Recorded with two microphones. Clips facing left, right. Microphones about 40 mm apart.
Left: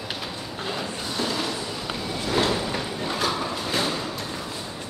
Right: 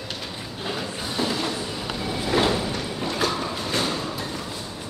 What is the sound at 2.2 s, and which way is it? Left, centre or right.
Sliding door, centre.